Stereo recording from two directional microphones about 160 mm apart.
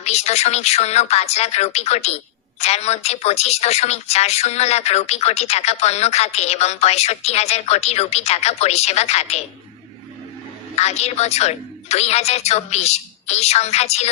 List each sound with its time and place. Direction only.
0.0 s speech: 40° left (ahead or behind)
10.8 s speech: 40° left (ahead or behind)